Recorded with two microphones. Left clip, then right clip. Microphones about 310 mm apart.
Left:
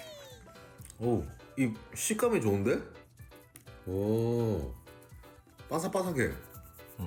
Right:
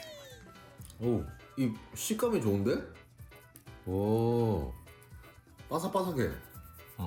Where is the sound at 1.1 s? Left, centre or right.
Centre.